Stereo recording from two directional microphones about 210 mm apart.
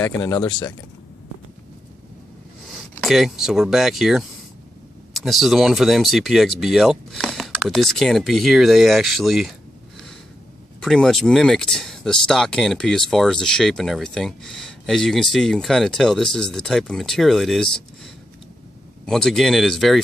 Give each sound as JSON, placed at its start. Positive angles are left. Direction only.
{"t": 0.0, "sound": "speech", "side_deg": 10}
{"t": 0.5, "sound": "speech", "side_deg": 20}
{"t": 2.6, "sound": "speech", "side_deg": 0}
{"t": 10.8, "sound": "speech", "side_deg": 0}